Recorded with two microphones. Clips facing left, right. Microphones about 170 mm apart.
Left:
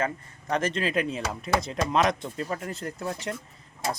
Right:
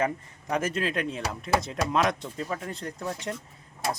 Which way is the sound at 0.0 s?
10° right (ahead or behind).